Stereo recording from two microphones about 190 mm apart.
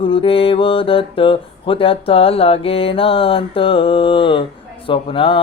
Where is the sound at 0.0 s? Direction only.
30° left (ahead or behind).